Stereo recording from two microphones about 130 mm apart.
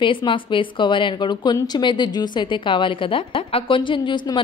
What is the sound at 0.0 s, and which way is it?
A woman's voice, 40° left (ahead or behind).